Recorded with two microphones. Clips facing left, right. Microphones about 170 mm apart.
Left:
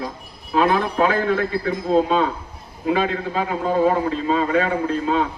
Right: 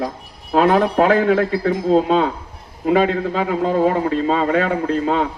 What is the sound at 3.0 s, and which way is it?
A man's voice, 70° right (ahead or behind).